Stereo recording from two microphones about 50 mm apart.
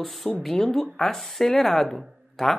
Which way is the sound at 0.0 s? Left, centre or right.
Centre.